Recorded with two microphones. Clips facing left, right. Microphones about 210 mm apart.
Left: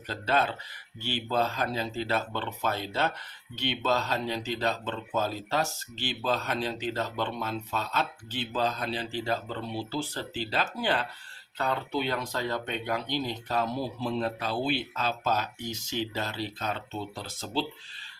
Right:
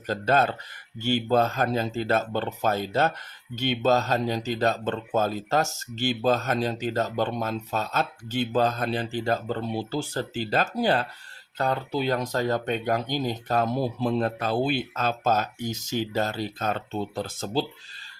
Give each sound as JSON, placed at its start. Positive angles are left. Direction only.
{"t": 0.1, "sound": "speech", "side_deg": -45}